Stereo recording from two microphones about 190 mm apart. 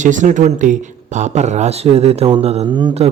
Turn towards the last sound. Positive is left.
turn(degrees=-30)  # may be behind; listen again after turning